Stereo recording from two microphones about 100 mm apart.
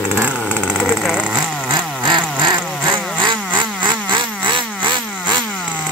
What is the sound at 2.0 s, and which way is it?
Vehicle, 50° right (ahead or behind).